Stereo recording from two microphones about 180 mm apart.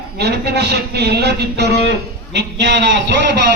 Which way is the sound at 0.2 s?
65° right (ahead or behind).